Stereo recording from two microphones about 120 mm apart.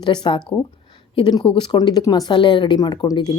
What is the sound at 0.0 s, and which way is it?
Speech, 40° left (ahead or behind).